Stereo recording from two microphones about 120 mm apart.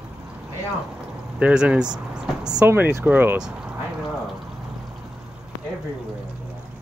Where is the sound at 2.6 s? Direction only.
20° right (ahead or behind).